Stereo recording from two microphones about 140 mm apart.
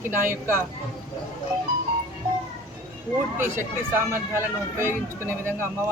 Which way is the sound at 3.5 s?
15° right (ahead or behind).